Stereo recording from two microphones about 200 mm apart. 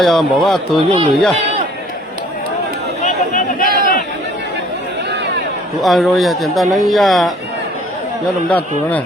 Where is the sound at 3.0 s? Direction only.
40° left (ahead or behind).